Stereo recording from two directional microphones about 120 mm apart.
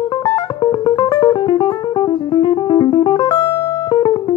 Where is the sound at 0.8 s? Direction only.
40° left (ahead or behind).